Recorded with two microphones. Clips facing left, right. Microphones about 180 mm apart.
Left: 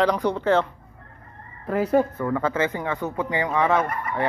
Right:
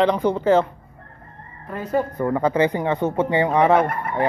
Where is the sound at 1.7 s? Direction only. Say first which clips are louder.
Left 5 dB; 90° left.